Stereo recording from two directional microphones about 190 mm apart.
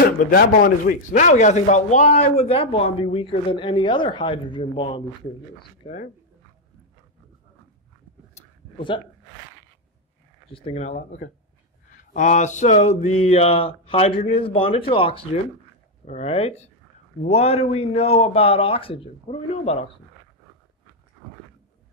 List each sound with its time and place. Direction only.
0.3 s speech: 50° left (ahead or behind); by 6.0 s 35° left (ahead or behind)
8.4 s a sound: 30° left (ahead or behind)
10.5 s speech: 30° left (ahead or behind)